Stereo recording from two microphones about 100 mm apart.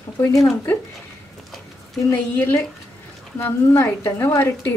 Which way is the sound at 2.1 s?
20° left (ahead or behind).